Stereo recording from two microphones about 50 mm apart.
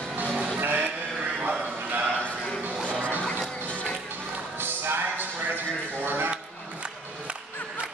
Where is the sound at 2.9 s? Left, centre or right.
Right.